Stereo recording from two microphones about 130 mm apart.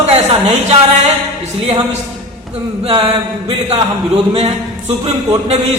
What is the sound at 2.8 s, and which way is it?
Speech, 50° right (ahead or behind).